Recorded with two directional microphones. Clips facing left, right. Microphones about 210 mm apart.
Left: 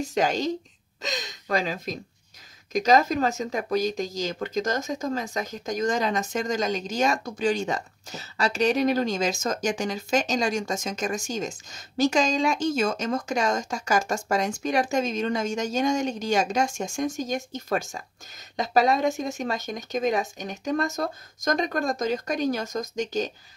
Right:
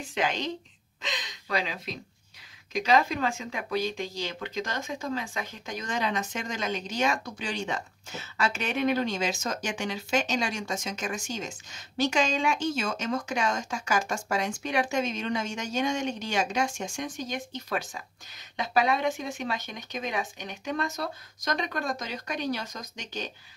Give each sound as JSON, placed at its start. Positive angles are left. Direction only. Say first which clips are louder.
{"t": 0.0, "sound": "speech", "louder": "left 6 dB", "side_deg": 40}